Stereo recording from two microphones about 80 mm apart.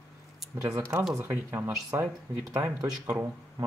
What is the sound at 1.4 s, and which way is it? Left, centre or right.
Speech, right.